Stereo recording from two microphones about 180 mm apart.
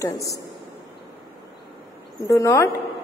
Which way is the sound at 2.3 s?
15° left (ahead or behind).